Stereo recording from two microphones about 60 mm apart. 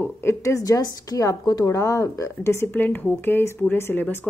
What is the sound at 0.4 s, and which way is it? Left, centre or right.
Speech, left.